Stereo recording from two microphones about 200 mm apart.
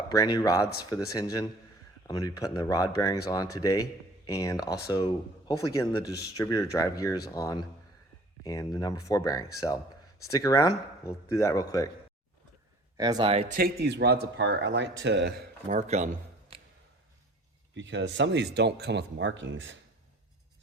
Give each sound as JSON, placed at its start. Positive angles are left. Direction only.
{"t": 0.1, "sound": "speech", "side_deg": 20}
{"t": 13.0, "sound": "speech", "side_deg": -20}
{"t": 13.5, "sound": "speech", "side_deg": -50}
{"t": 15.7, "sound": "speech", "side_deg": -35}
{"t": 17.7, "sound": "speech", "side_deg": -65}